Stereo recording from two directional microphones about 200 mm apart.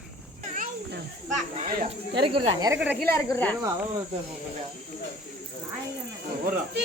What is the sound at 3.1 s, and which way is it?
Speech, 15° left (ahead or behind).